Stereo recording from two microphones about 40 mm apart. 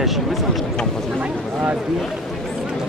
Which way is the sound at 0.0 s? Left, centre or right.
Centre.